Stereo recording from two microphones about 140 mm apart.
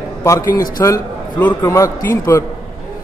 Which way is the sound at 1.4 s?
10° left (ahead or behind).